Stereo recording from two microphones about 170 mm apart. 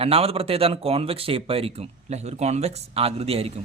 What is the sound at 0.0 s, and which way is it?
A man's voice, 35° right (ahead or behind).